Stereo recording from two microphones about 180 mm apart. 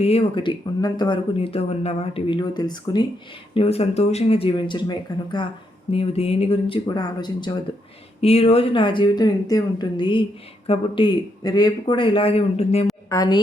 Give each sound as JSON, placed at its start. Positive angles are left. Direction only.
{"t": 0.0, "sound": "speech", "side_deg": 35}
{"t": 8.2, "sound": "speech", "side_deg": 35}
{"t": 13.1, "sound": "a woman's voice", "side_deg": 20}